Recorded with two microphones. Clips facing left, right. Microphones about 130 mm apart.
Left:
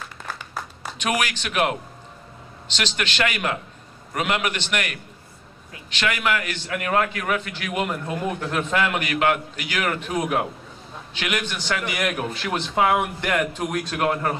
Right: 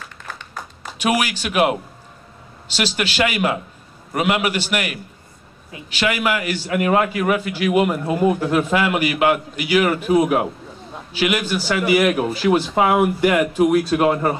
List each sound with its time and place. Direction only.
0.3 s applause: 5° left (ahead or behind)
0.9 s a man's voice: 10° right (ahead or behind)